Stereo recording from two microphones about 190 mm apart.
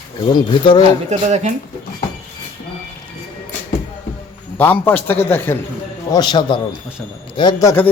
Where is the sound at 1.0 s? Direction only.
35° right (ahead or behind).